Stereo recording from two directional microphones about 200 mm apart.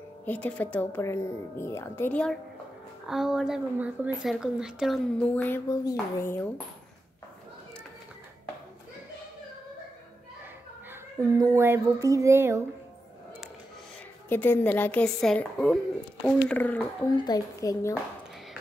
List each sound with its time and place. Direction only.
0.2 s a woman's voice: 10° left (ahead or behind)
10.9 s speech: 15° right (ahead or behind)
14.3 s speech: 10° left (ahead or behind)
17.1 s speech: 20° left (ahead or behind)